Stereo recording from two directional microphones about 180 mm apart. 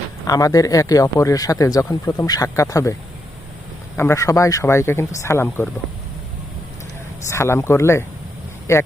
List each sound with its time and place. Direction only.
0.3 s speech: 20° left (ahead or behind)
3.9 s speech: 15° left (ahead or behind)
7.3 s speech: 15° left (ahead or behind)